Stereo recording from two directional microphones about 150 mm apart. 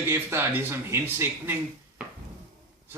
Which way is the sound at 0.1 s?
15° right (ahead or behind).